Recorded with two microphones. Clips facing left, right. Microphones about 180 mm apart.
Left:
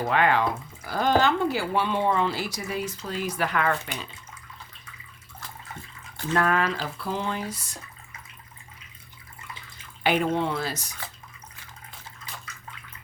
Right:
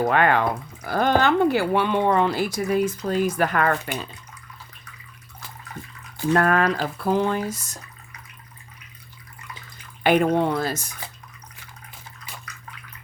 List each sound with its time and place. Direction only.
0.0 s speech: 55° right (ahead or behind)
6.3 s speech: 50° right (ahead or behind)
10.0 s speech: 55° right (ahead or behind)